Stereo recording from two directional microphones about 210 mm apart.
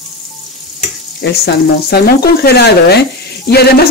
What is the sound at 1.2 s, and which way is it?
Speech, 50° left (ahead or behind).